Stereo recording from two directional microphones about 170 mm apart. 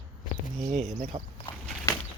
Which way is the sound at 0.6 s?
45° right (ahead or behind).